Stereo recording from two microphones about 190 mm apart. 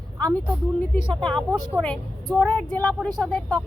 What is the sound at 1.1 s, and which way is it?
A woman's voice, 5° left (ahead or behind).